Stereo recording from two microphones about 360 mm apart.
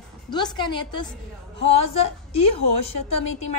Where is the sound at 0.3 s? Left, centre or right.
Centre.